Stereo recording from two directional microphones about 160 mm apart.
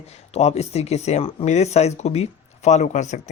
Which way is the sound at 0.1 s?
40° left (ahead or behind).